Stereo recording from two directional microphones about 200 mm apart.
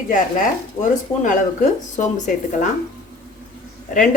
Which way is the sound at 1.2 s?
40° left (ahead or behind).